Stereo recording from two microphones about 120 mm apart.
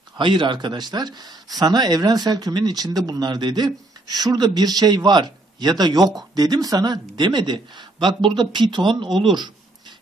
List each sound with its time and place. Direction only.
0.2 s speech: 40° right (ahead or behind)
9.3 s writing: 40° right (ahead or behind)